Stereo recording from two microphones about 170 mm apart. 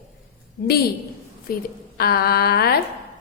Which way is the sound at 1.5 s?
55° left (ahead or behind).